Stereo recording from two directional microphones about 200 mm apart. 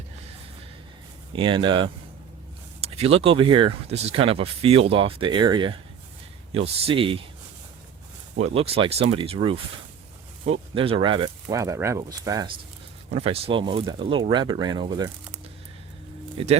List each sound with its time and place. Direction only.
1.3 s speech: 25° right (ahead or behind)
2.8 s a sound: 30° right (ahead or behind)
3.2 s speech: 25° right (ahead or behind)
8.4 s speech: 30° right (ahead or behind)
13.1 s speech: 30° right (ahead or behind)
16.4 s speech: 25° right (ahead or behind)